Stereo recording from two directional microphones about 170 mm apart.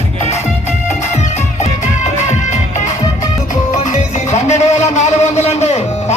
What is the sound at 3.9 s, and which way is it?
Music, 40° left (ahead or behind).